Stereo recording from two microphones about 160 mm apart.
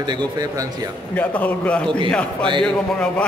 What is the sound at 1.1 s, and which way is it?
A man's voice, 10° left (ahead or behind).